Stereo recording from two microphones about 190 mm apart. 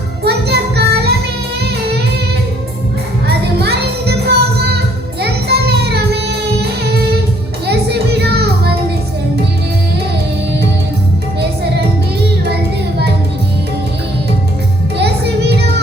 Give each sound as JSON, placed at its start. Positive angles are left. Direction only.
{"t": 0.3, "sound": "child singing", "side_deg": -60}
{"t": 3.2, "sound": "music", "side_deg": -55}
{"t": 7.7, "sound": "music", "side_deg": -60}
{"t": 14.9, "sound": "music", "side_deg": -60}